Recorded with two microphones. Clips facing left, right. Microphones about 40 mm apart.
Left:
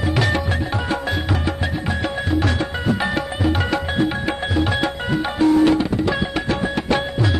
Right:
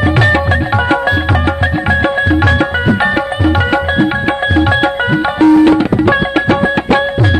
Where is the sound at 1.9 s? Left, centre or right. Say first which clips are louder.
Right 11 dB; right.